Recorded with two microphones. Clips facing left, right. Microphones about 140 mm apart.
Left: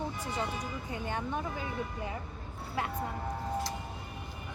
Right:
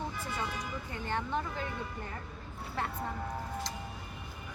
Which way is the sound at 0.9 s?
15° left (ahead or behind).